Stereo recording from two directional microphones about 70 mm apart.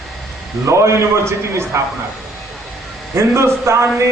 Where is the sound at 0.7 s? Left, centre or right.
Right.